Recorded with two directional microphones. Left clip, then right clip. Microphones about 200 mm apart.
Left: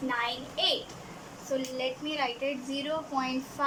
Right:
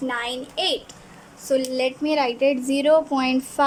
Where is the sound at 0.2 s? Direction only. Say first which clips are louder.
Right 4 dB; 45° right (ahead or behind).